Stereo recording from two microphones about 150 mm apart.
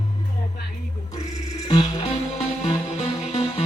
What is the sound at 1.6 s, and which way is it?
Music, 30° left (ahead or behind).